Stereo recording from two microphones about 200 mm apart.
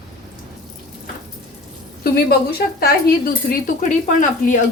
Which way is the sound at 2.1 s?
50° left (ahead or behind).